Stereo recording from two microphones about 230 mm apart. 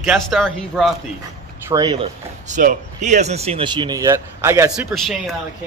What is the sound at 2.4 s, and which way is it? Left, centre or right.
Speech, right.